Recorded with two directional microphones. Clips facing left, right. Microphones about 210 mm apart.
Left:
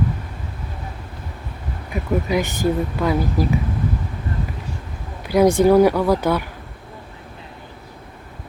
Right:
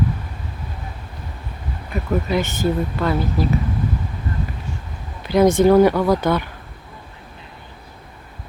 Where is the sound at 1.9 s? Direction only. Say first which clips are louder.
Even; 10° left (ahead or behind).